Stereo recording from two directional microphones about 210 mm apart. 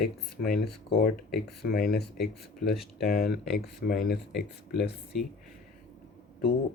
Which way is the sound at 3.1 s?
45° left (ahead or behind).